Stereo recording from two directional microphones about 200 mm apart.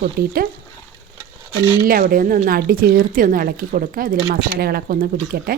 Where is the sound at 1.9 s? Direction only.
45° right (ahead or behind).